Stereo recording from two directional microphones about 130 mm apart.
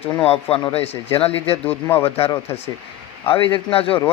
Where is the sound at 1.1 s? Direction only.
45° left (ahead or behind).